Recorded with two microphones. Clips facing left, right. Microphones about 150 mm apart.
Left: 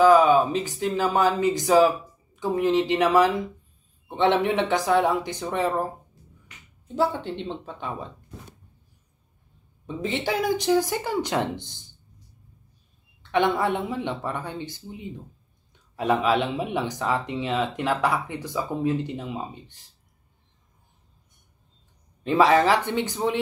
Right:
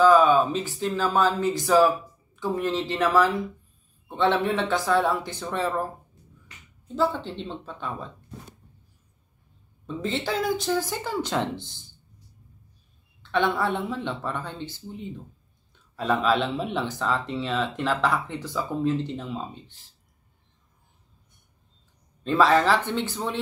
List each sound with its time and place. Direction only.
0.0 s a sound: 15° left (ahead or behind)
0.9 s speech: 15° left (ahead or behind)
7.0 s speech: 15° left (ahead or behind)
9.8 s speech: 15° left (ahead or behind)
13.2 s speech: 15° left (ahead or behind)
16.0 s speech: 15° left (ahead or behind)
22.2 s speech: 15° left (ahead or behind)